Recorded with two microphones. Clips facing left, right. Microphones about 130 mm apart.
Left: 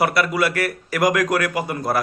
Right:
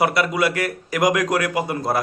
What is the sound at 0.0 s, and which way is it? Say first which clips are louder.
Speech: even; 20° right (ahead or behind).